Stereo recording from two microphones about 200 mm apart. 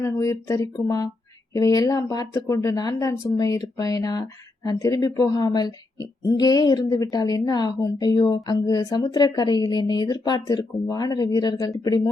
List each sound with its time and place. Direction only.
0.0 s a woman's voice: 15° left (ahead or behind)